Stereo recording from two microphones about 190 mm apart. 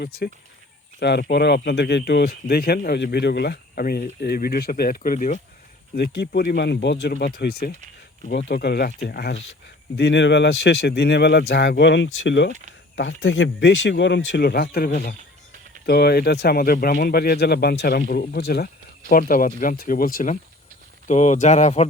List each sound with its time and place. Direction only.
0.9 s speech: 60° left (ahead or behind); by 5.4 s 45° left (ahead or behind)
6.0 s speech: 55° left (ahead or behind)
13.0 s speech: 85° left; by 21.8 s 35° left (ahead or behind)